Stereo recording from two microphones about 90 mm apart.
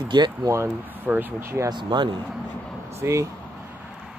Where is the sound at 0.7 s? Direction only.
20° right (ahead or behind).